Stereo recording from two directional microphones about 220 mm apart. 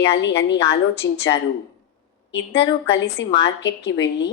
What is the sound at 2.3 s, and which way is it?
A woman's voice, 50° left (ahead or behind).